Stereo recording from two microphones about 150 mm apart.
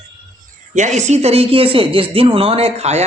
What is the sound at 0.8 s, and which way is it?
Speech, 50° right (ahead or behind).